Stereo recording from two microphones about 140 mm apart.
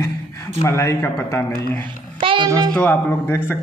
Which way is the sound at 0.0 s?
20° left (ahead or behind).